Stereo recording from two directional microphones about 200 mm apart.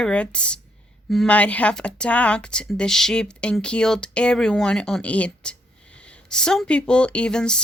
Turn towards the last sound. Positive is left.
turn(degrees=5)  # may be behind; listen again after turning